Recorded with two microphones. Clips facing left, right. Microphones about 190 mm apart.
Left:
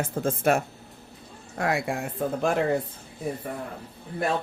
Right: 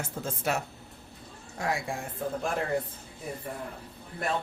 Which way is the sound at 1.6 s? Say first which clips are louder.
Left 5 dB; 65° left (ahead or behind).